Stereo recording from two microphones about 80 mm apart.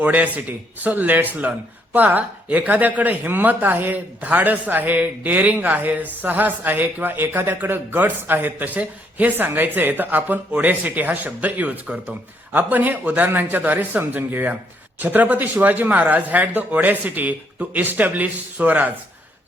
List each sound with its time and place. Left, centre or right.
0.0 s speech: centre